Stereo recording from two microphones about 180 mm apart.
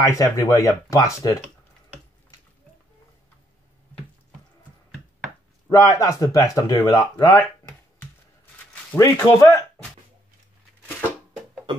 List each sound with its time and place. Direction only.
0.0 s speech: 15° left (ahead or behind)
5.7 s speech: 20° left (ahead or behind)
8.9 s speech: 20° left (ahead or behind)